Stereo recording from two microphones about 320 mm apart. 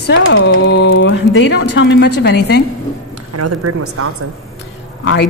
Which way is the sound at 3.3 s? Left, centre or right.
Right.